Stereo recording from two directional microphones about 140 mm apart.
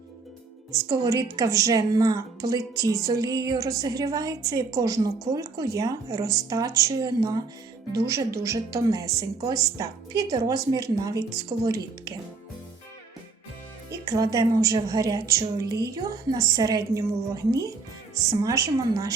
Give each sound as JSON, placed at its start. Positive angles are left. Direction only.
{"t": 0.7, "sound": "a woman's voice", "side_deg": -25}
{"t": 13.9, "sound": "a woman's voice", "side_deg": -25}